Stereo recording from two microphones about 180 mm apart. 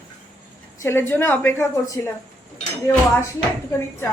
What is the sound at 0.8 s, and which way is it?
A woman's voice, 15° left (ahead or behind).